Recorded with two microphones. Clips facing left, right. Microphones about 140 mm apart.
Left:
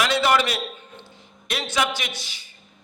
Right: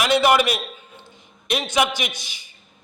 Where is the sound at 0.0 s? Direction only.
15° right (ahead or behind).